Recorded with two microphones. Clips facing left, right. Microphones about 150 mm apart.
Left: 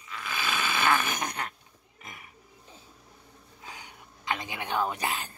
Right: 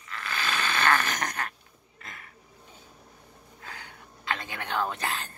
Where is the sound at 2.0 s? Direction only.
15° left (ahead or behind).